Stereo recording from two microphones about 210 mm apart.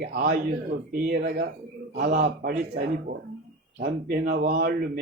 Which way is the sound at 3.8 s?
45° right (ahead or behind).